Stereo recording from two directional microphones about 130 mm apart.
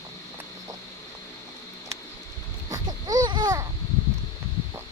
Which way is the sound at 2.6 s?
25° right (ahead or behind).